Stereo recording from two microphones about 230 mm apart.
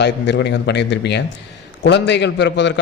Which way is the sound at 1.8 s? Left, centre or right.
Left.